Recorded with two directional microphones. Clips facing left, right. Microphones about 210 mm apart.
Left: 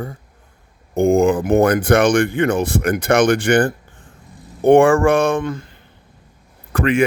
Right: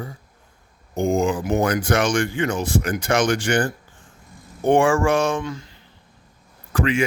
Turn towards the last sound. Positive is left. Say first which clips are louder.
# left 4 dB
turn(degrees=55)  # may be behind; listen again after turning